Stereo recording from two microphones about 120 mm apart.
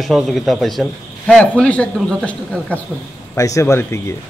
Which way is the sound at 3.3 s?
25° left (ahead or behind).